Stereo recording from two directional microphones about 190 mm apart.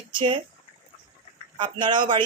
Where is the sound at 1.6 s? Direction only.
25° right (ahead or behind).